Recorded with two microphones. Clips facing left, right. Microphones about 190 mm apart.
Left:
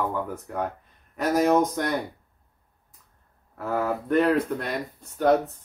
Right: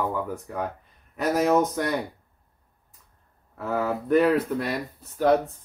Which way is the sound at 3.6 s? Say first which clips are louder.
Even; centre (ahead or behind).